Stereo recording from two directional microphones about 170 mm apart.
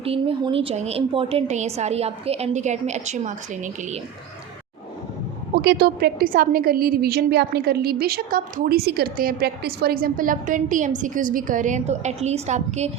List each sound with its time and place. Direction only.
0.0 s a woman's voice: 35° right (ahead or behind)
5.5 s a woman's voice: 70° right (ahead or behind); by 12.9 s 40° right (ahead or behind)